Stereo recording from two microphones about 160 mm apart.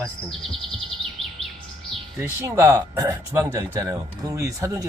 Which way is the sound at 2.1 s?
15° right (ahead or behind).